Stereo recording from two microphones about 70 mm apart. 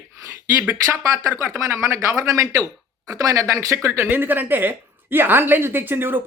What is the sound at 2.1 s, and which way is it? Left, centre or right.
Speech, right.